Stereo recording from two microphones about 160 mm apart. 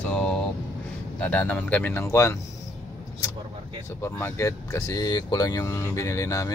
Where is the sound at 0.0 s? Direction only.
5° left (ahead or behind).